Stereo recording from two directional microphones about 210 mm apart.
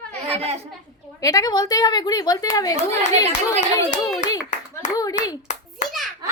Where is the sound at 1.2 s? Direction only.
15° left (ahead or behind).